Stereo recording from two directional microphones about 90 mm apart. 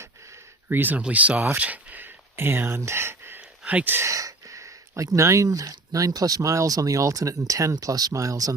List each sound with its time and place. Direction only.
0.7 s speech: 20° right (ahead or behind)
4.0 s speech: 40° right (ahead or behind)